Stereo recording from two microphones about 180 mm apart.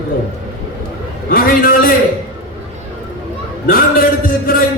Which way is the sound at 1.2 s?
55° left (ahead or behind).